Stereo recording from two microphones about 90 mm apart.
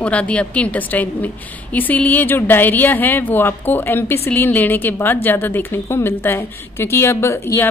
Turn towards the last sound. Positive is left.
turn(degrees=30)  # may be behind; listen again after turning